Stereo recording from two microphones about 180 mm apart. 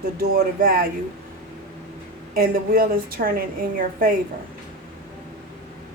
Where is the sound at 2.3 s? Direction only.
50° right (ahead or behind).